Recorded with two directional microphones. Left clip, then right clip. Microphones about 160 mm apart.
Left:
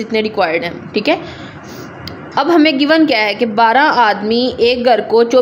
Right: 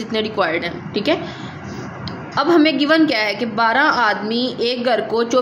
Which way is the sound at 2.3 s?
25° left (ahead or behind).